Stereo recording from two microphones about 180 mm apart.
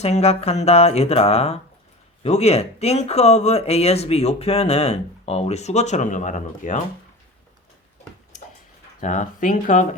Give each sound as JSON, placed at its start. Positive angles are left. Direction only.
{"t": 0.0, "sound": "speech", "side_deg": 35}
{"t": 9.0, "sound": "speech", "side_deg": 40}